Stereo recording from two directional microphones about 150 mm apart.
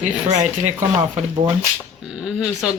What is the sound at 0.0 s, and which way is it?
Speech, 55° right (ahead or behind).